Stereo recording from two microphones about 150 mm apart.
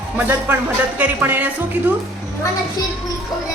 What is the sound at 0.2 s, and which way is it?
Speech, 15° right (ahead or behind).